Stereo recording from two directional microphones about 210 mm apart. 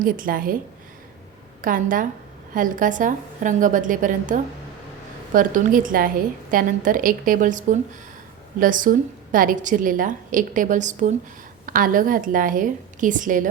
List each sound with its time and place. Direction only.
0.0 s a woman's voice: 40° right (ahead or behind)
1.6 s a woman's voice: 40° right (ahead or behind)